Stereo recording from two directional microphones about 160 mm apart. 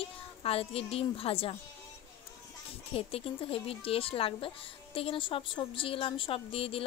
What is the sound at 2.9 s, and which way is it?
Speech, 35° left (ahead or behind).